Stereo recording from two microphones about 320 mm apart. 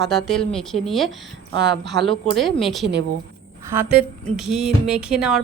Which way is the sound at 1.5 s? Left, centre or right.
Right.